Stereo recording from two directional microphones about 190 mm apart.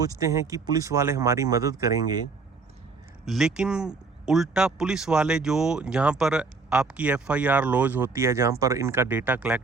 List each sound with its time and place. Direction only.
0.0 s speech: 15° right (ahead or behind)
3.2 s speech: centre (ahead or behind)